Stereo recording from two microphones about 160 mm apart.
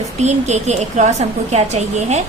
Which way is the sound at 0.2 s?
45° right (ahead or behind).